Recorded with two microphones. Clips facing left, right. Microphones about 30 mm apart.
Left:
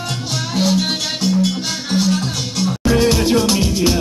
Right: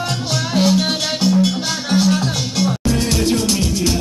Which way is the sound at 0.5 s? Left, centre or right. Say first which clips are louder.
Right 1 dB; centre.